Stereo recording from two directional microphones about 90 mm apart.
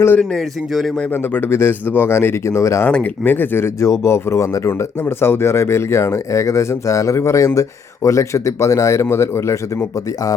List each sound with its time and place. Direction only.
0.3 s a man's voice: centre (ahead or behind)
1.1 s speech: 25° left (ahead or behind)
2.8 s speech: 20° left (ahead or behind)